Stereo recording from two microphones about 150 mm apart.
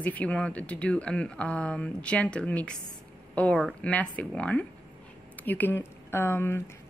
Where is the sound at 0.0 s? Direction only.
10° left (ahead or behind).